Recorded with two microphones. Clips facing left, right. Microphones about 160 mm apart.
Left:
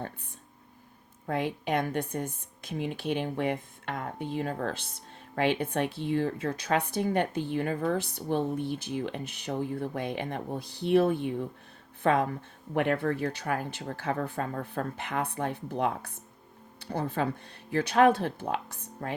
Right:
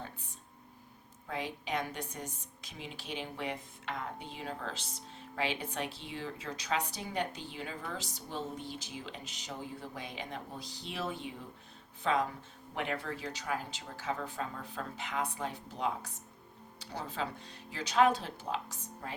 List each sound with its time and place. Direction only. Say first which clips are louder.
1.3 s a woman's voice: left 8 dB; 55° left (ahead or behind)